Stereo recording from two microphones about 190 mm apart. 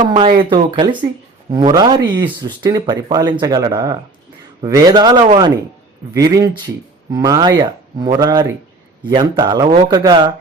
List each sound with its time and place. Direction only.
0.0 s speech: 25° right (ahead or behind)